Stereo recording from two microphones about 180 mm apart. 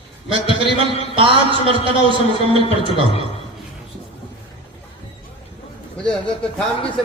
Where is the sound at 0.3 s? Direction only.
30° right (ahead or behind).